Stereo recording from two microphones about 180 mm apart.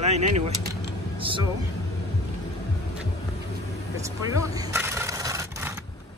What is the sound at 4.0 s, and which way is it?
Rub, 15° right (ahead or behind).